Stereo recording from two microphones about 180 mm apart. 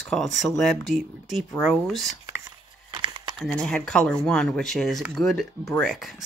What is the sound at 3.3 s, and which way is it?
Speech, 5° left (ahead or behind).